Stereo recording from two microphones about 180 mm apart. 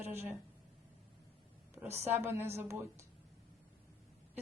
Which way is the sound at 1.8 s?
15° right (ahead or behind).